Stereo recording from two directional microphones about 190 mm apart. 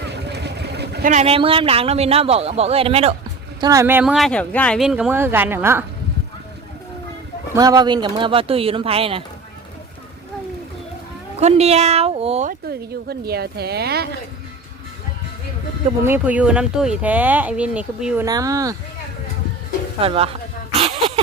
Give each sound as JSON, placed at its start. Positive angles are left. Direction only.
{"t": 0.0, "sound": "vehicle", "side_deg": -60}
{"t": 1.0, "sound": "speech", "side_deg": -35}
{"t": 3.6, "sound": "speech", "side_deg": -15}
{"t": 7.5, "sound": "speech", "side_deg": -20}
{"t": 11.3, "sound": "speech", "side_deg": -35}
{"t": 12.5, "sound": "speech", "side_deg": -55}
{"t": 16.0, "sound": "speech", "side_deg": -10}
{"t": 18.3, "sound": "speech", "side_deg": -20}
{"t": 20.0, "sound": "speech", "side_deg": -30}